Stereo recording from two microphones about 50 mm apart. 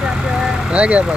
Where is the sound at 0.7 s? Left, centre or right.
Right.